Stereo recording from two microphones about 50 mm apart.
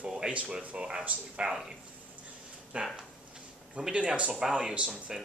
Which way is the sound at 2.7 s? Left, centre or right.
Right.